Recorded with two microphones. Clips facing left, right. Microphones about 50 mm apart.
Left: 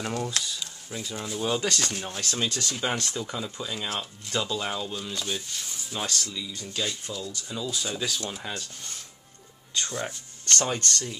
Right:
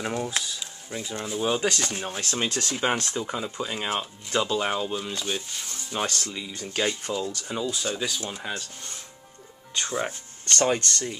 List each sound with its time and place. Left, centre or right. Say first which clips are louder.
0.0 s speech: right 2 dB; centre
0.4 s a sound: even; centre
1.2 s speech: right 3 dB; centre
6.0 s speech: right 2 dB; right
7.6 s speech: right 1 dB; centre
9.8 s speech: right 3 dB; centre